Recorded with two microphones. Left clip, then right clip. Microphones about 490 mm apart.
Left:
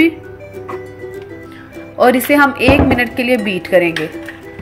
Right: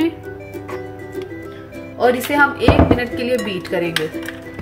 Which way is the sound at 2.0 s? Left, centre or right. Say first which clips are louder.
Left 4 dB; centre.